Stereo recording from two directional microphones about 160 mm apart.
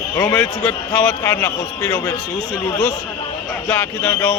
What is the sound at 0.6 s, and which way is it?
A man's voice, 10° left (ahead or behind).